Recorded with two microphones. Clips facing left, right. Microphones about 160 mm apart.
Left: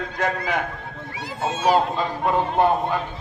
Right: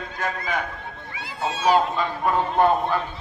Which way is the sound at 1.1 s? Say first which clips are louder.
Left 2 dB; 45° left (ahead or behind).